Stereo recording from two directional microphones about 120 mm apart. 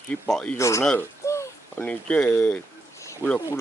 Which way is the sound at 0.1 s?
5° left (ahead or behind).